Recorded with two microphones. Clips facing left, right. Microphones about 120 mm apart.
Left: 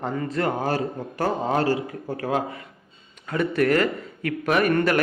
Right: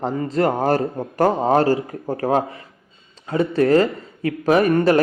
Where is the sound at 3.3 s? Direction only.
25° right (ahead or behind).